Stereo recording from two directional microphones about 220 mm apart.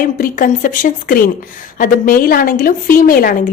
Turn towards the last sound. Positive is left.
turn(degrees=40)  # may be behind; listen again after turning